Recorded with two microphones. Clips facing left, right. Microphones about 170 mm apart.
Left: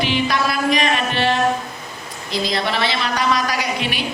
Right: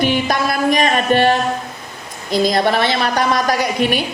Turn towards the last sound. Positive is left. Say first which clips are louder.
# right 6 dB
turn(degrees=-50)  # may be behind; listen again after turning